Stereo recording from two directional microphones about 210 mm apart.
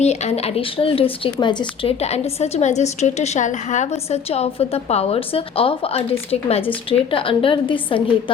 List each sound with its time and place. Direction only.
0.0 s speech: 30° left (ahead or behind)